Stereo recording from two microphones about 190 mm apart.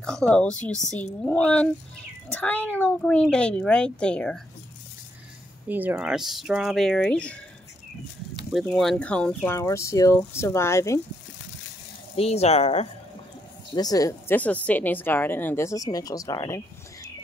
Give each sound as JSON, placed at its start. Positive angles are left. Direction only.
{"t": 0.0, "sound": "speech", "side_deg": 5}
{"t": 5.7, "sound": "speech", "side_deg": -10}
{"t": 8.5, "sound": "speech", "side_deg": 0}
{"t": 12.2, "sound": "speech", "side_deg": 30}
{"t": 13.7, "sound": "speech", "side_deg": 20}